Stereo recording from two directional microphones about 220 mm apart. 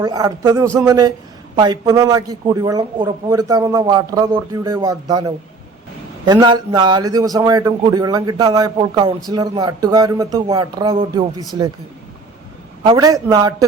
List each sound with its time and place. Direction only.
0.0 s a man's voice: 15° right (ahead or behind)
12.8 s a man's voice: 20° right (ahead or behind)